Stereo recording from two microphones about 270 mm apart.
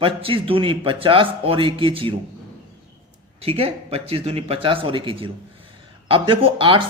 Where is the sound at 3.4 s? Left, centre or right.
Right.